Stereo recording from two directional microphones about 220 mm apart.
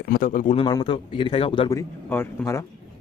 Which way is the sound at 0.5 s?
20° left (ahead or behind).